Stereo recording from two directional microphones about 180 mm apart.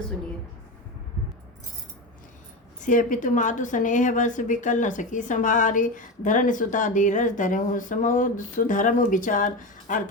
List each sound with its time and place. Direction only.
2.8 s a woman's voice: 45° left (ahead or behind)